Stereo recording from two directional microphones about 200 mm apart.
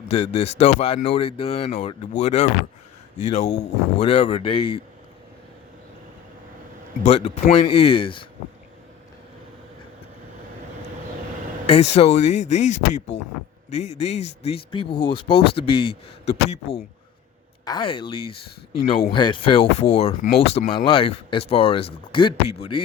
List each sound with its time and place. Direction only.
0.1 s speech: 30° left (ahead or behind)
7.0 s speech: 30° left (ahead or behind)
11.6 s speech: 30° left (ahead or behind)